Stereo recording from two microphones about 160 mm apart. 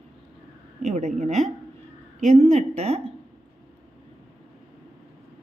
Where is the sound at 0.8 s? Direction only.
45° right (ahead or behind).